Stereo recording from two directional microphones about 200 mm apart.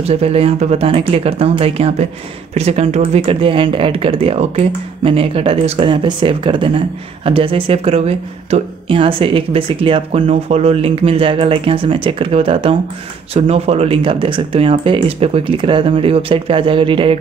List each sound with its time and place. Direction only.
0.0 s speech: 30° right (ahead or behind)